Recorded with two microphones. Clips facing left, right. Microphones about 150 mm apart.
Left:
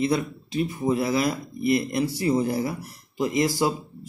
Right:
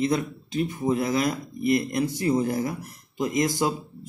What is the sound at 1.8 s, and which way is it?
Speech, 30° left (ahead or behind).